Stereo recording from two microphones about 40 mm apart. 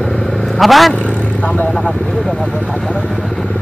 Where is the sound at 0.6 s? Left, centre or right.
Centre.